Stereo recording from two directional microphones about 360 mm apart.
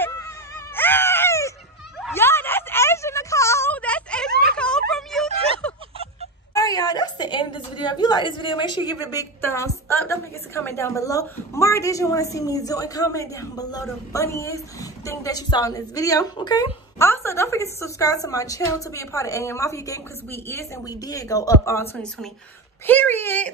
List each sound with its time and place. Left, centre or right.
0.7 s wail: centre
2.0 s a sound: centre
6.5 s a woman's voice: centre